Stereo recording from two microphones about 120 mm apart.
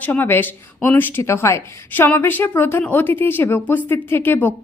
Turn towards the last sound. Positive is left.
turn(degrees=15)  # may be behind; listen again after turning